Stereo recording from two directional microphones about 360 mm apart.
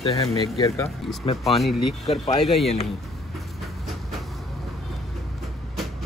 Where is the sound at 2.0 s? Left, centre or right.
Centre.